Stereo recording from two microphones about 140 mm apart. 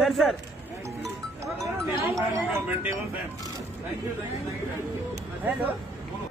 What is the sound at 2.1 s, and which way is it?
Speech, 15° right (ahead or behind).